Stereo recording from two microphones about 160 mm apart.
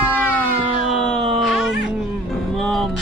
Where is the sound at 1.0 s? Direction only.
Centre (ahead or behind).